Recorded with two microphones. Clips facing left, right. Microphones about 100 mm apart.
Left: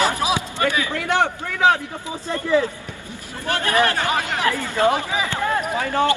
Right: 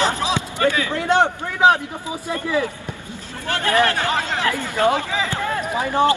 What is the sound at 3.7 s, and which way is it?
Speech, 15° left (ahead or behind).